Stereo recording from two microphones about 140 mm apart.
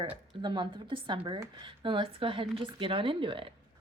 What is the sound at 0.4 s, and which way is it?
A woman's voice, 35° right (ahead or behind).